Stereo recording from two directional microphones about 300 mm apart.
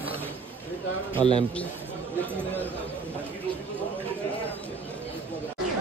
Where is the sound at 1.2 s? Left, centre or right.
Centre.